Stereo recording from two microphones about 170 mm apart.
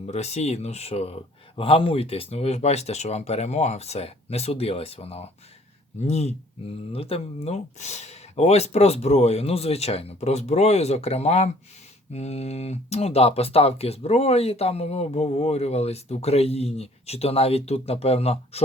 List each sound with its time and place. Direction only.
0.0 s speech: 40° left (ahead or behind)